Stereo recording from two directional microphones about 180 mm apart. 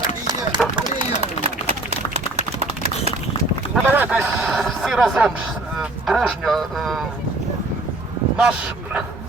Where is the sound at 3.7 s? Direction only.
10° right (ahead or behind).